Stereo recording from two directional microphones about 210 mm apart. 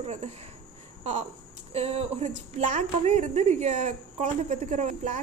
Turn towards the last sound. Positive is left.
turn(degrees=-35)  # may be behind; listen again after turning